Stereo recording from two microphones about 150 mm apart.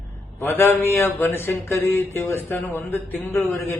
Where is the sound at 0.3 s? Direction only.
15° left (ahead or behind).